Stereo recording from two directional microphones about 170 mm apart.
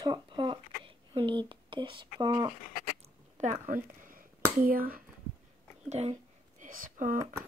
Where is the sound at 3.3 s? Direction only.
50° right (ahead or behind).